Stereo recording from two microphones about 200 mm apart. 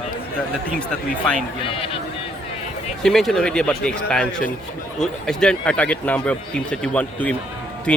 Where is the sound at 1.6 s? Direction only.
25° left (ahead or behind).